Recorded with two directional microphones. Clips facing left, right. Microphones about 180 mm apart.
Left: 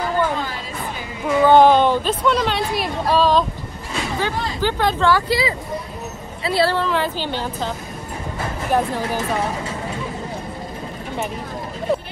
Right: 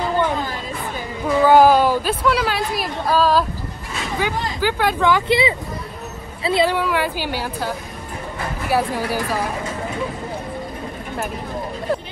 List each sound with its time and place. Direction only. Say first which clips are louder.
1.4 s a woman's voice: even; 5° right (ahead or behind)
9.1 s speech: left 1 dB; 25° left (ahead or behind)